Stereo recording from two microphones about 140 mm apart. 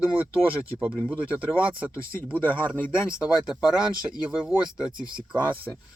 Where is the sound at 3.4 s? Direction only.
5° right (ahead or behind).